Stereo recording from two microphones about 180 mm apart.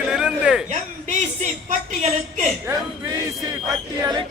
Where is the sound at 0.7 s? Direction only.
45° right (ahead or behind).